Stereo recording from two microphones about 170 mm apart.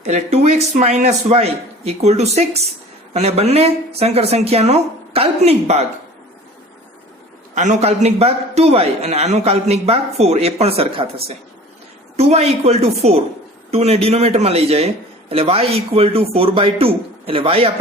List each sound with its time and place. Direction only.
0.0 s speech: 40° right (ahead or behind)
7.5 s speech: 45° right (ahead or behind)